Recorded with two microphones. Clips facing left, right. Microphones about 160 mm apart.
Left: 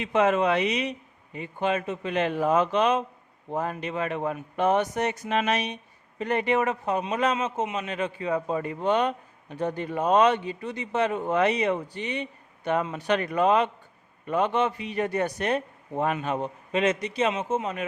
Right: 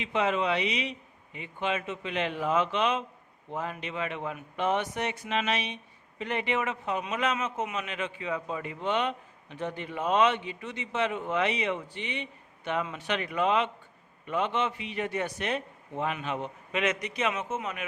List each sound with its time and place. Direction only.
0.0 s speech: 50° left (ahead or behind); by 7.9 s 25° left (ahead or behind)
7.9 s a man's voice: 40° left (ahead or behind)